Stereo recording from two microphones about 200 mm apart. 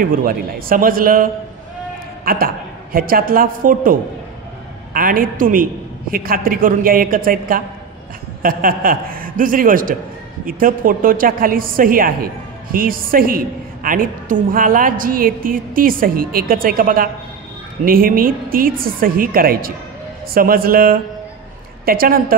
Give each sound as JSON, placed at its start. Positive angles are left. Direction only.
{"t": 0.0, "sound": "a woman's voice", "side_deg": -45}